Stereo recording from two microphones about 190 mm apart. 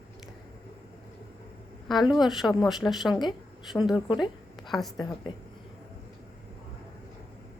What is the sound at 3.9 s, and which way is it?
Speech, 25° left (ahead or behind).